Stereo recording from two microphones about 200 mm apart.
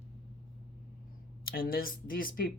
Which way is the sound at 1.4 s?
45° left (ahead or behind).